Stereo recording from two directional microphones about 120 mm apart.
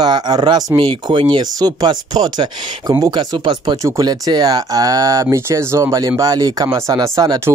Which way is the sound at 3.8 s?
30° right (ahead or behind).